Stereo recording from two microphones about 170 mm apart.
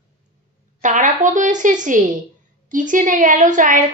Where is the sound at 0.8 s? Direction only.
50° right (ahead or behind).